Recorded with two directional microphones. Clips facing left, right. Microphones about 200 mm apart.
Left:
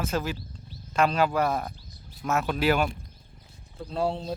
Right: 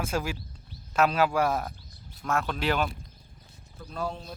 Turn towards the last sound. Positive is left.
turn(degrees=30)  # may be behind; listen again after turning